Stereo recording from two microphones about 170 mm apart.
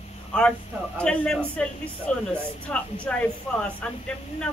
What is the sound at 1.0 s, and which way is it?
A man's voice, 5° left (ahead or behind).